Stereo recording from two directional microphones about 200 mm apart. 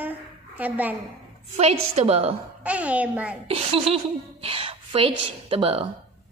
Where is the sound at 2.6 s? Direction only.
5° right (ahead or behind).